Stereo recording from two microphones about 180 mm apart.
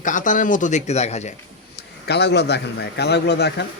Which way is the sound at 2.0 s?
70° left (ahead or behind).